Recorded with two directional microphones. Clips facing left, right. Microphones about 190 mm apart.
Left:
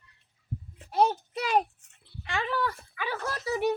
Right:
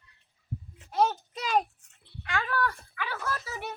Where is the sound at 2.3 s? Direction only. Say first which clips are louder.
Even; 25° left (ahead or behind).